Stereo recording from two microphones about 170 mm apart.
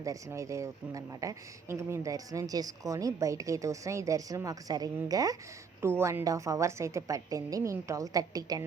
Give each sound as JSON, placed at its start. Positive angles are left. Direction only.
{"t": 0.0, "sound": "speech", "side_deg": -20}